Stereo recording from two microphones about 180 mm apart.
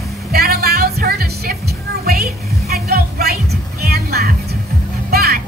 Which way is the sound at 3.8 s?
60° right (ahead or behind).